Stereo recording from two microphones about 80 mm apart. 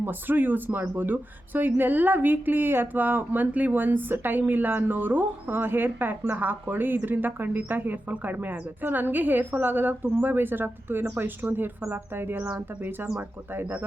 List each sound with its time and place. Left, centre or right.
0.0 s speech: right